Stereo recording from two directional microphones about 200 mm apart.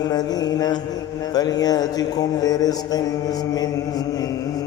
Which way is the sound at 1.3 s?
20° left (ahead or behind).